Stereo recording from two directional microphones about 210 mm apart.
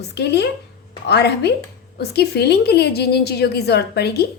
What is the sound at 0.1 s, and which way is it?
A woman's voice, 55° left (ahead or behind).